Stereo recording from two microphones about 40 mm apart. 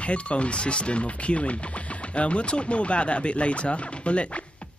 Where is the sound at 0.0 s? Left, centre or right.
Left.